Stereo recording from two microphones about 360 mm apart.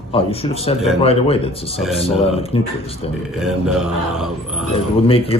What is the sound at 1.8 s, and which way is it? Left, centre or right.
Speech, centre.